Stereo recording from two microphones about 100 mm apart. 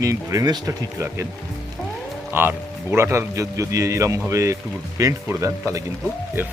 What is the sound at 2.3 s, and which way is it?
Speech, 20° right (ahead or behind).